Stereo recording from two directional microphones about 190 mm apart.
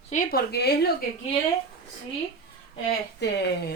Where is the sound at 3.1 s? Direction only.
60° left (ahead or behind).